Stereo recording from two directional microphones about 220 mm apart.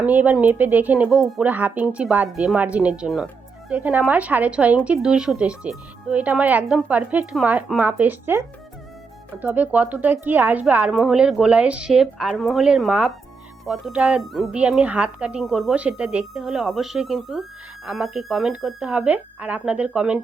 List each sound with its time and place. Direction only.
0.0 s a woman's voice: 5° right (ahead or behind)